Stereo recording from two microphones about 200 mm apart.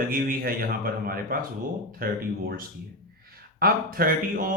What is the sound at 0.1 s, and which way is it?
A man's voice, 45° right (ahead or behind).